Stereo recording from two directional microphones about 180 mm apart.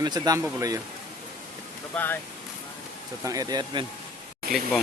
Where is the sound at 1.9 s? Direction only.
10° left (ahead or behind).